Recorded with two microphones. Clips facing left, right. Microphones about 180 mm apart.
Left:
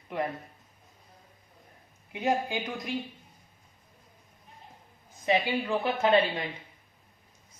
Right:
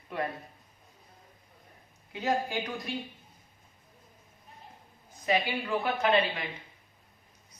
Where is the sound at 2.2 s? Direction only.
15° left (ahead or behind).